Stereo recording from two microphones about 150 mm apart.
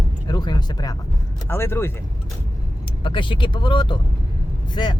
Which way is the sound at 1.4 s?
15° left (ahead or behind).